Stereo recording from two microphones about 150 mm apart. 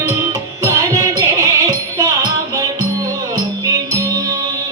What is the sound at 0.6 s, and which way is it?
Music, 25° right (ahead or behind).